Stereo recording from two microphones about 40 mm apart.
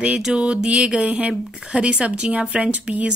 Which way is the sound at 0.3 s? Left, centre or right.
Right.